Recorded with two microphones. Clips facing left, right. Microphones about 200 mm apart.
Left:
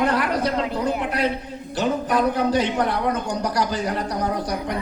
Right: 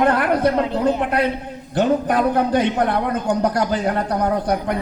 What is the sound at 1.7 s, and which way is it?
A man's voice, 55° right (ahead or behind).